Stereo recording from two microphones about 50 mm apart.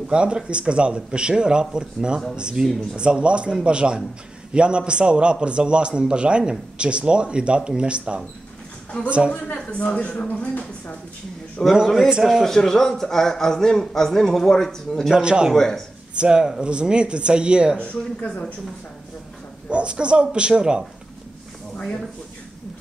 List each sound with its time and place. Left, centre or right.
0.1 s a man's voice: right
9.7 s speech: left
11.6 s a man's voice: centre
12.1 s speech: centre
12.4 s a man's voice: centre
15.1 s speech: centre
15.5 s a man's voice: centre
16.2 s a man's voice: centre
17.7 s speech: left
19.7 s a man's voice: right
21.7 s speech: centre